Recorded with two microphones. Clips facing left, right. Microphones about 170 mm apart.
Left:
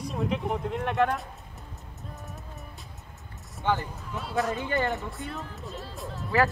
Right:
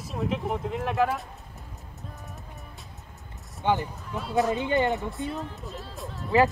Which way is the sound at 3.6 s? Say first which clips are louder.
Right 2 dB; 15° right (ahead or behind).